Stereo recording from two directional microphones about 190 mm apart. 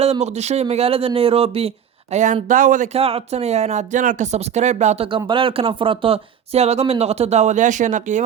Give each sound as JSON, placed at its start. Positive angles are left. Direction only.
{"t": 0.0, "sound": "speech", "side_deg": -35}